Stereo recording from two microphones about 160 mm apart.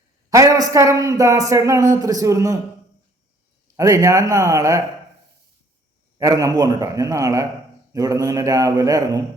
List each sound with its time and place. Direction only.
0.3 s a man's voice: 20° right (ahead or behind)
3.8 s a man's voice: 20° right (ahead or behind)
6.1 s a man's voice: 20° right (ahead or behind)